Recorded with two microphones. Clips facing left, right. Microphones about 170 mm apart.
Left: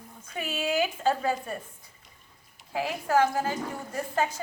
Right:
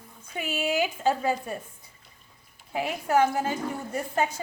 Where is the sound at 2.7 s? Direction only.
20° right (ahead or behind).